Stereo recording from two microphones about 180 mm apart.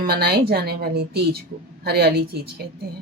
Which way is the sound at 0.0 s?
60° right (ahead or behind).